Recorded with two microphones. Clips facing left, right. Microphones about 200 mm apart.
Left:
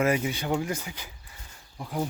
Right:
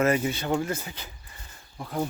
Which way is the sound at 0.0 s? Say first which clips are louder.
Right 2 dB; 10° left (ahead or behind).